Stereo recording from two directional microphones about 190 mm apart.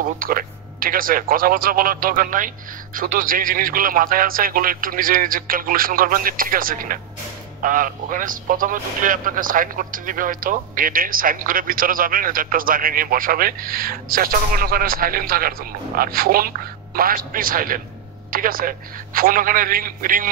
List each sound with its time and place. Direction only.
0.2 s a man's voice: 50° right (ahead or behind)